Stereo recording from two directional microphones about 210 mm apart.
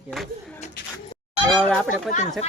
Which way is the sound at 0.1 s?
Centre (ahead or behind).